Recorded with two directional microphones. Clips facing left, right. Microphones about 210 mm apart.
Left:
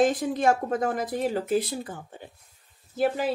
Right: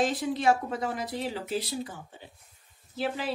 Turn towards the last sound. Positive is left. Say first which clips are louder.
# left 7 dB
turn(degrees=45)  # may be behind; listen again after turning